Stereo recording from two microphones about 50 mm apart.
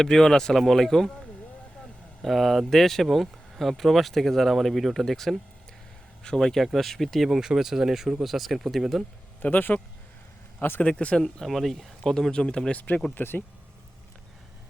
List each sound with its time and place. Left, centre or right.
0.0 s speech: centre
2.2 s speech: centre
7.3 s speech: centre
9.4 s speech: left
10.8 s speech: left
11.2 s speech: centre
12.3 s speech: centre
12.7 s speech: left
13.1 s speech: left